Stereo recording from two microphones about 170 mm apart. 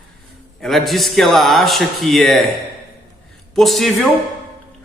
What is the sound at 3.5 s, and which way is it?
Speech, centre (ahead or behind).